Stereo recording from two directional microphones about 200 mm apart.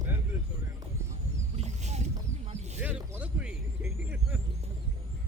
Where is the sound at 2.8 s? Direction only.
10° right (ahead or behind).